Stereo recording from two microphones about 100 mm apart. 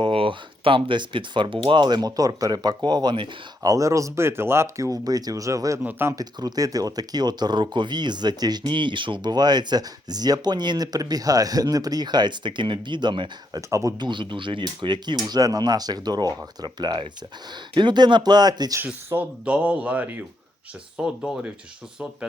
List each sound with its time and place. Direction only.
0.0 s speech: 65° right (ahead or behind); by 5.8 s 35° right (ahead or behind)
5.8 s speech: 20° right (ahead or behind)
6.1 s speech: 35° right (ahead or behind)
13.6 s speech: 30° right (ahead or behind)
14.0 s speech: 50° right (ahead or behind)
19.1 s speech: 15° right (ahead or behind)
21.0 s speech: 5° right (ahead or behind)